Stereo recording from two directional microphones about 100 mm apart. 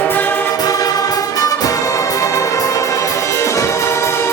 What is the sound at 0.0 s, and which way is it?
Music, 20° left (ahead or behind).